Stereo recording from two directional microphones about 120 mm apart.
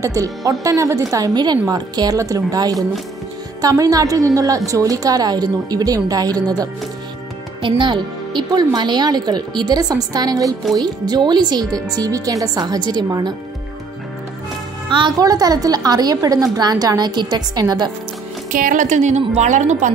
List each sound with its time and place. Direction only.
0.0 s a woman's voice: 25° right (ahead or behind)
7.6 s a woman's voice: 45° right (ahead or behind)
14.9 s a woman's voice: 45° right (ahead or behind)
15.1 s a woman's voice: 30° right (ahead or behind)
18.5 s a woman's voice: 90° right